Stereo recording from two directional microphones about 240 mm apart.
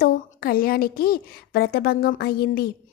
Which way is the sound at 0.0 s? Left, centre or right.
Left.